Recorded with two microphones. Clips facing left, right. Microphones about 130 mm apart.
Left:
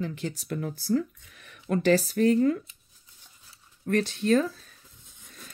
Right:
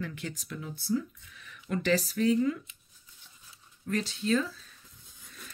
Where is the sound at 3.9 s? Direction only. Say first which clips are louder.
Left 5 dB; 55° left (ahead or behind).